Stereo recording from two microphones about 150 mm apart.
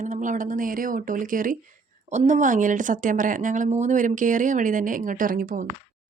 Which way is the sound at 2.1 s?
55° right (ahead or behind).